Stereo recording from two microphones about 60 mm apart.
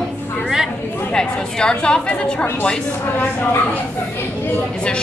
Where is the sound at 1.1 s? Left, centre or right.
Centre.